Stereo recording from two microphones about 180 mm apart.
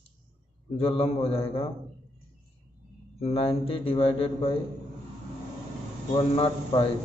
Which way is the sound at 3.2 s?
35° left (ahead or behind).